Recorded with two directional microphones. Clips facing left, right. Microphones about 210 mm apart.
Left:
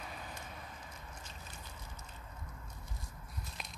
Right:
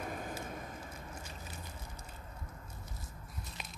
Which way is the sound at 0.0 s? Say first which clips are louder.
Right 7 dB; 50° right (ahead or behind).